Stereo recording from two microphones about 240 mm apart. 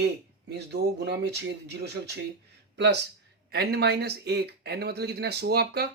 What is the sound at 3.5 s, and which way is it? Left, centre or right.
Speech, right.